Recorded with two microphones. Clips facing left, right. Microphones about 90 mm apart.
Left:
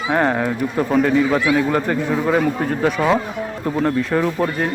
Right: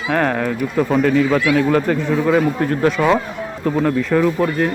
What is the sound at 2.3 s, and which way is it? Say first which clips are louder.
Speech: right 3 dB; 10° left (ahead or behind).